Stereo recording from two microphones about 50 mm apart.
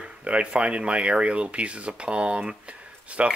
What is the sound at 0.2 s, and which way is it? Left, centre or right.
Speech, right.